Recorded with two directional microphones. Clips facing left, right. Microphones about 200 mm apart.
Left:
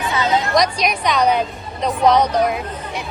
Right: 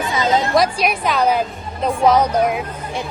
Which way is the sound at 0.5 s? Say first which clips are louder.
Right 1 dB; 5° right (ahead or behind).